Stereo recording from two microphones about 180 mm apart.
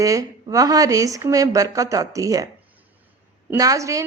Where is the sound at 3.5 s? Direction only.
20° right (ahead or behind).